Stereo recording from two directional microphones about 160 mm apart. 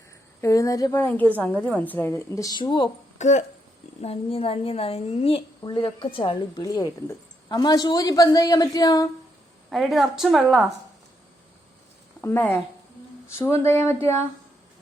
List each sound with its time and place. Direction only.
0.4 s a woman's voice: 20° left (ahead or behind)
1.0 s a woman's voice: 10° left (ahead or behind); by 2.9 s 30° left (ahead or behind)
3.2 s speech: 50° left (ahead or behind)
4.0 s a woman's voice: 35° left (ahead or behind); by 9.0 s 20° left (ahead or behind)
9.6 s a woman's voice: centre (ahead or behind)
12.2 s a woman's voice: 15° left (ahead or behind)